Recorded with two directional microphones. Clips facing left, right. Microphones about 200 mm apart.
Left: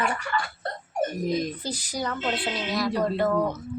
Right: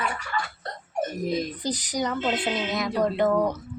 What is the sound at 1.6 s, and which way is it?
Speech, 15° right (ahead or behind).